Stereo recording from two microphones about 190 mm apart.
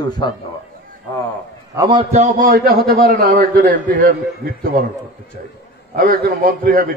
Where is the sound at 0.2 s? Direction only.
25° left (ahead or behind).